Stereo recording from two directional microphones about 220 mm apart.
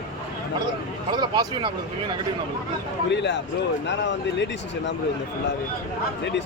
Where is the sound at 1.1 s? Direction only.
20° right (ahead or behind).